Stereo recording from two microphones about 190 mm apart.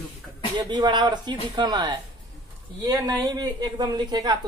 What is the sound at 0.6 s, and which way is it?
Speech, 20° right (ahead or behind).